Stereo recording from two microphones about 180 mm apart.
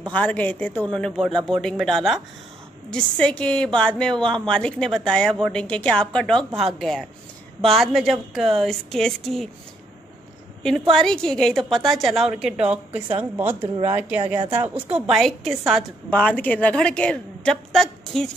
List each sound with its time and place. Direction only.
0.0 s a woman's voice: 10° left (ahead or behind)
10.9 s a woman's voice: 5° left (ahead or behind)
13.6 s speech: 30° right (ahead or behind)
14.7 s a woman's voice: 5° right (ahead or behind)